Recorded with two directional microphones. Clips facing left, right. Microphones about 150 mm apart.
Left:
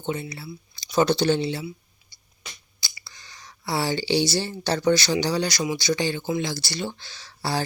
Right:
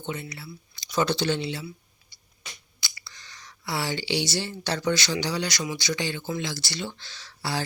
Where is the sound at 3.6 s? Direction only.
35° left (ahead or behind).